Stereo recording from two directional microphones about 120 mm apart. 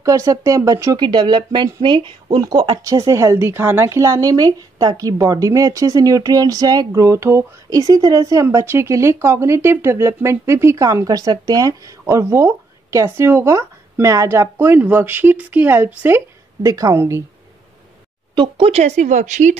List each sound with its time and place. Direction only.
0.0 s speech: 25° right (ahead or behind)
1.0 s speech: 40° right (ahead or behind); by 16.2 s 15° right (ahead or behind)
16.6 s speech: 30° right (ahead or behind)
18.3 s speech: 40° right (ahead or behind)
18.7 s speech: 65° right (ahead or behind); by 19.5 s 90° right